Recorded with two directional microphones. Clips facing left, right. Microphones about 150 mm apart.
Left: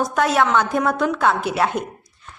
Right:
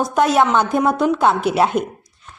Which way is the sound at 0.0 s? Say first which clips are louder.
Right 3 dB; 20° right (ahead or behind).